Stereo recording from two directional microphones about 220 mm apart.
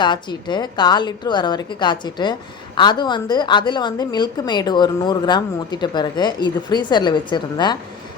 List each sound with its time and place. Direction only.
0.0 s a woman's voice: 20° left (ahead or behind)